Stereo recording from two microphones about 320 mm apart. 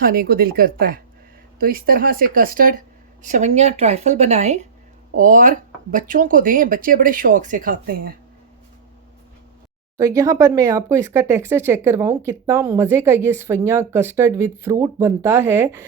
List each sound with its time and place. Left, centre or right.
0.0 s speech: right
10.0 s speech: centre